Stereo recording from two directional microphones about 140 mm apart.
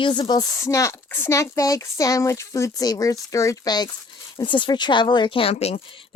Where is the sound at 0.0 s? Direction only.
30° left (ahead or behind).